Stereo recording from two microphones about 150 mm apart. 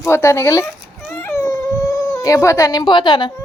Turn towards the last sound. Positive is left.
turn(degrees=30)  # may be behind; listen again after turning